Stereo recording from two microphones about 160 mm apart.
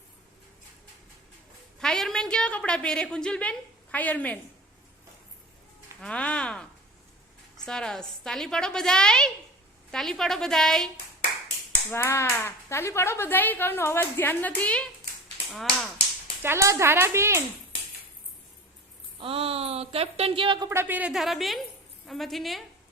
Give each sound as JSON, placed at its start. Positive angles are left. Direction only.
{"t": 1.8, "sound": "a woman's voice", "side_deg": 5}
{"t": 6.0, "sound": "a woman's voice", "side_deg": 5}
{"t": 11.9, "sound": "speech", "side_deg": 15}
{"t": 16.4, "sound": "speech", "side_deg": -15}
{"t": 19.2, "sound": "a woman's voice", "side_deg": -35}
{"t": 20.7, "sound": "a woman's voice", "side_deg": -15}